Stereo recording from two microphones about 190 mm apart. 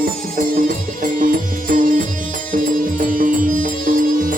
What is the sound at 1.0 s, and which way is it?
Music, 45° right (ahead or behind).